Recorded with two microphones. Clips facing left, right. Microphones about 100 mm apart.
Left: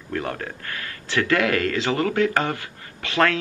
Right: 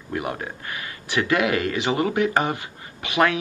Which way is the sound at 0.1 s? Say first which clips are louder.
Even; 15° right (ahead or behind).